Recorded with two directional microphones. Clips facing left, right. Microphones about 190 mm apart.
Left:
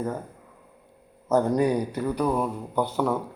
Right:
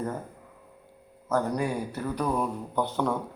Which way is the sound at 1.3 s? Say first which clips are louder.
Left 6 dB; 20° left (ahead or behind).